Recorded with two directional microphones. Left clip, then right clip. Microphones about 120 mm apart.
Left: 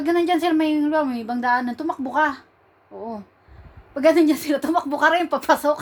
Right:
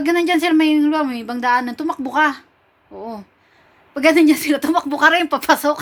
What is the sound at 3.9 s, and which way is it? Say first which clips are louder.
A woman's voice: right 3 dB; 30° right (ahead or behind).